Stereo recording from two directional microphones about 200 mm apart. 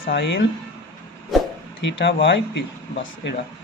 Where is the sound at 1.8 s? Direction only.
65° left (ahead or behind).